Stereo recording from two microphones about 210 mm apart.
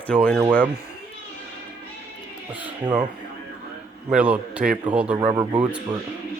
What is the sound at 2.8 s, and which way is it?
Speech, 20° right (ahead or behind).